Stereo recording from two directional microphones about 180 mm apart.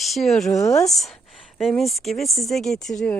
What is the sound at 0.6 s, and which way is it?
Speech, 20° left (ahead or behind).